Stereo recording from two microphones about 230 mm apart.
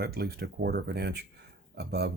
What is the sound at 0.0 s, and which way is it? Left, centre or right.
Speech, right.